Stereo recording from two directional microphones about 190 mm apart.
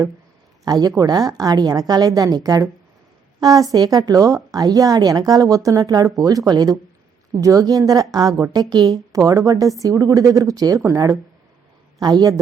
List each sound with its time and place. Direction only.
0.6 s a woman's voice: 20° right (ahead or behind)